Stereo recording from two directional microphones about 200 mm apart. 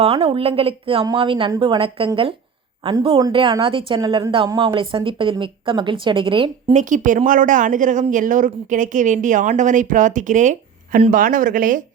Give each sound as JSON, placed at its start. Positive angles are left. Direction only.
{"t": 0.0, "sound": "a woman's voice", "side_deg": -30}
{"t": 6.8, "sound": "speech", "side_deg": -40}